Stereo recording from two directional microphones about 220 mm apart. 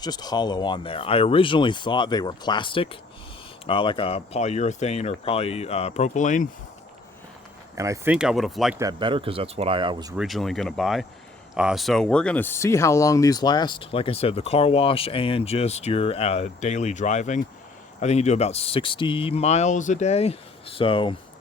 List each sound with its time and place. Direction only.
0.0 s speech: 20° left (ahead or behind); by 6.5 s 35° left (ahead or behind)
7.8 s speech: 10° right (ahead or behind)
8.8 s speech: 20° right (ahead or behind)
10.2 s speech: centre (ahead or behind); by 21.2 s 25° left (ahead or behind)